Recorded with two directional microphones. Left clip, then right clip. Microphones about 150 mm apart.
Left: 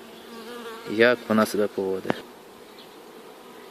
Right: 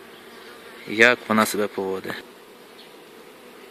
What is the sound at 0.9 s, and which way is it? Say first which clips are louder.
Speech: right 3 dB; 5° left (ahead or behind).